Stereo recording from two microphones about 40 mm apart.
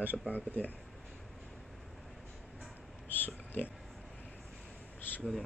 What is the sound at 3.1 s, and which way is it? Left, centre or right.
Oink, left.